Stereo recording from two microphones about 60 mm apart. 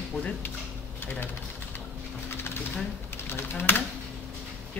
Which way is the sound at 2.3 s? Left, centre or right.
Left.